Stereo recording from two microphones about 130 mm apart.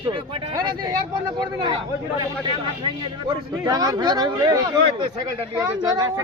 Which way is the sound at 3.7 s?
30° right (ahead or behind).